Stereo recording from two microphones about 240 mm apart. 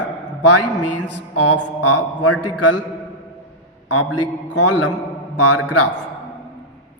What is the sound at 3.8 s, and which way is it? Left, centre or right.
Speech, left.